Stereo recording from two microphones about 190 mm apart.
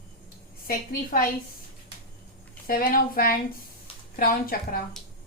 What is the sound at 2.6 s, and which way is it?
Speech, 50° left (ahead or behind).